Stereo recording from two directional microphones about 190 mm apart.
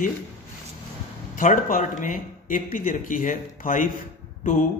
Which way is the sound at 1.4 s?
45° left (ahead or behind).